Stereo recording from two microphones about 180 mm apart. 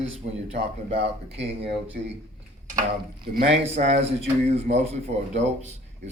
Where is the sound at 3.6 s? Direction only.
40° right (ahead or behind).